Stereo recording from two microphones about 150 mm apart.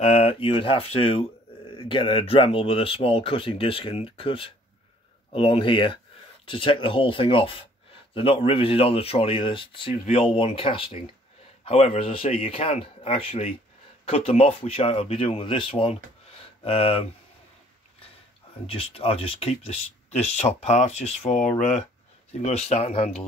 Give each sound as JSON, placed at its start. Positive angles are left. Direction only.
{"t": 0.0, "sound": "speech", "side_deg": 40}
{"t": 18.7, "sound": "speech", "side_deg": 40}